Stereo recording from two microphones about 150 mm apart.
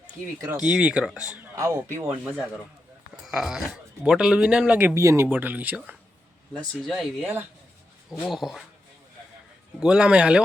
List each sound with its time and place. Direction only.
0.5 s speech: 5° right (ahead or behind)
1.5 s speech: 20° right (ahead or behind)
3.2 s speech: centre (ahead or behind)
8.3 s speech: centre (ahead or behind)
9.8 s speech: 5° right (ahead or behind)